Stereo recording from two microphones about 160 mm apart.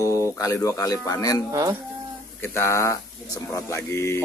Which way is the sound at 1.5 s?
20° right (ahead or behind).